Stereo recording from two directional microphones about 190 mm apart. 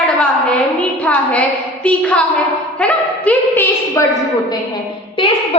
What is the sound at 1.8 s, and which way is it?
A woman's voice, 5° left (ahead or behind).